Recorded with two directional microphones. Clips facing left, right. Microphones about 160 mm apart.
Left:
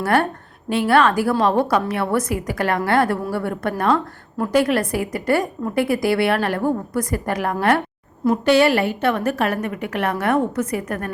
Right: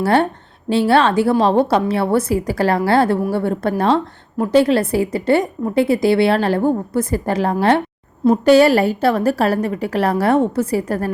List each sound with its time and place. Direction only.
0.0 s a woman's voice: 25° right (ahead or behind)